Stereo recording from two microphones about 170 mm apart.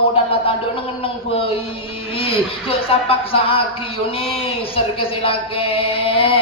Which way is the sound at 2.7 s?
35° left (ahead or behind).